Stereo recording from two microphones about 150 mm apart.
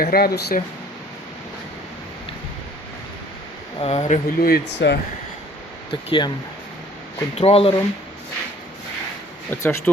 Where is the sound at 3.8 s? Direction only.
45° left (ahead or behind).